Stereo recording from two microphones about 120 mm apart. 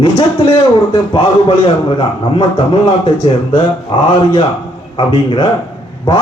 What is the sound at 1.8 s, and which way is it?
Speech, 45° left (ahead or behind).